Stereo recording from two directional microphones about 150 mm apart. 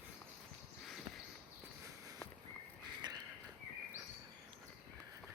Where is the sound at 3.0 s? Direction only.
30° right (ahead or behind).